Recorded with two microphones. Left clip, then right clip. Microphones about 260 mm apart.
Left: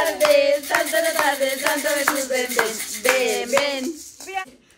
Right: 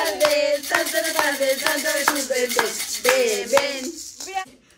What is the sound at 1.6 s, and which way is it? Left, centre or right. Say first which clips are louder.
Music: left 1 dB; right.